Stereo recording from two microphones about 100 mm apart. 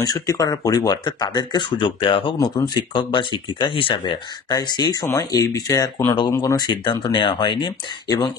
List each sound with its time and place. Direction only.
0.0 s speech: 40° left (ahead or behind); by 2.3 s 60° left (ahead or behind)
2.4 s speech: 45° left (ahead or behind)
6.6 s speech: 50° left (ahead or behind)